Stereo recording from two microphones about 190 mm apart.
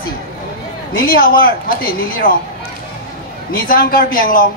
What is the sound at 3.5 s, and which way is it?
Speech, 50° left (ahead or behind).